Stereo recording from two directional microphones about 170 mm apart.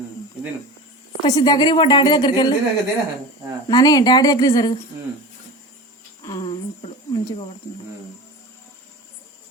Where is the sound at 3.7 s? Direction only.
25° left (ahead or behind).